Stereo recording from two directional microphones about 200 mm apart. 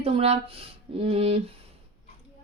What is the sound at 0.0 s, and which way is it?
Speech, 30° right (ahead or behind).